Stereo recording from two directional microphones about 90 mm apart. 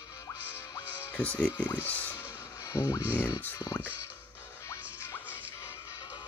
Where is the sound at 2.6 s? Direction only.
35° left (ahead or behind).